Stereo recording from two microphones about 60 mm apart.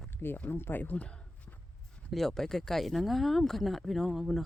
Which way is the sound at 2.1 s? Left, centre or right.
Centre.